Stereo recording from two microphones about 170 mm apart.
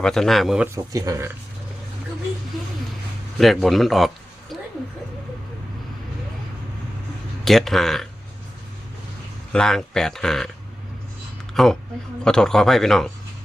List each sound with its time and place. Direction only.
0.0 s speech: centre (ahead or behind)
0.9 s speech: 20° right (ahead or behind)
3.3 s a man's voice: centre (ahead or behind)
7.4 s speech: centre (ahead or behind)
9.5 s speech: 5° left (ahead or behind)
11.5 s speech: centre (ahead or behind)